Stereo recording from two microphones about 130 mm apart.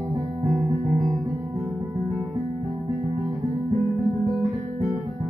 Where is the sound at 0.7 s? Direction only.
40° right (ahead or behind).